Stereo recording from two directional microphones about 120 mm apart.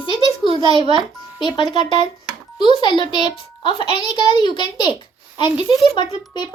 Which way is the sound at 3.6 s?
45° left (ahead or behind).